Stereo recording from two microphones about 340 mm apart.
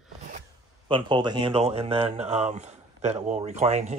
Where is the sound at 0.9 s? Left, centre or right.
Centre.